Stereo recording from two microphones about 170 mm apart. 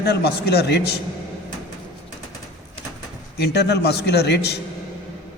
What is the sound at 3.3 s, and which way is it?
A man's voice, 75° left (ahead or behind).